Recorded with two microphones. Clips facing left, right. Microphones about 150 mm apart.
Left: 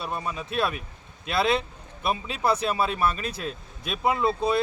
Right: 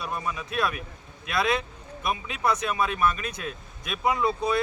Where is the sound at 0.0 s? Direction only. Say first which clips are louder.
Left 1 dB; 25° left (ahead or behind).